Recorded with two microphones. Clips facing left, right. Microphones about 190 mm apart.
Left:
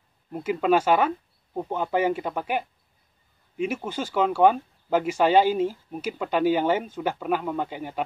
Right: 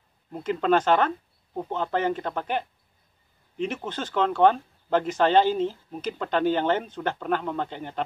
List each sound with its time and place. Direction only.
0.3 s speech: 10° left (ahead or behind)